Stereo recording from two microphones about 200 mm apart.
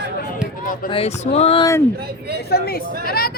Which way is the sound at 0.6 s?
40° left (ahead or behind).